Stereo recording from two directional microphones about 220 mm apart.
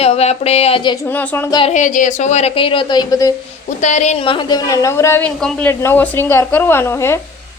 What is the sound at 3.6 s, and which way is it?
A woman's voice, 35° left (ahead or behind).